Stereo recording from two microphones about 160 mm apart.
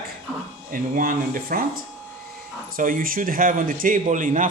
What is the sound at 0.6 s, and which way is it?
Speech, 60° right (ahead or behind).